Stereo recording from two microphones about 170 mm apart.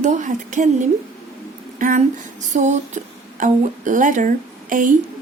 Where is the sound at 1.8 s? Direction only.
50° right (ahead or behind).